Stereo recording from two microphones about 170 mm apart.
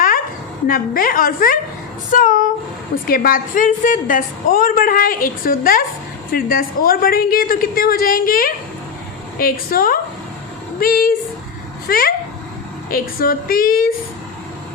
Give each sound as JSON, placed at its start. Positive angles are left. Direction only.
{"t": 0.7, "sound": "a woman's voice", "side_deg": 55}